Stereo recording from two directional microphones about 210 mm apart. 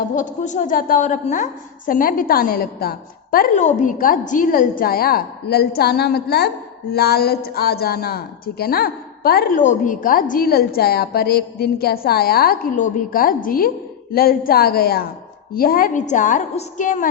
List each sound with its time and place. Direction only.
0.0 s a woman's voice: 35° left (ahead or behind)